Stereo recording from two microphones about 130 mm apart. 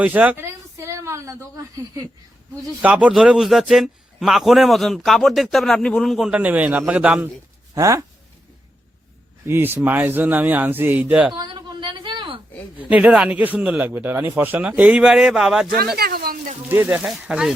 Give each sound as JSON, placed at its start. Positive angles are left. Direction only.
{"t": 0.0, "sound": "a sound", "side_deg": -10}
{"t": 2.8, "sound": "a man's voice", "side_deg": -10}
{"t": 6.3, "sound": "speech", "side_deg": -10}
{"t": 7.8, "sound": "speech", "side_deg": -25}
{"t": 9.5, "sound": "speech", "side_deg": -20}
{"t": 11.3, "sound": "a sound", "side_deg": -35}
{"t": 12.9, "sound": "speech", "side_deg": -10}
{"t": 16.6, "sound": "speech", "side_deg": -15}